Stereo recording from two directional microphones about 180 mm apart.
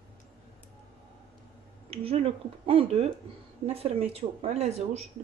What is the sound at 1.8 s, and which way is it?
Speech, 35° right (ahead or behind).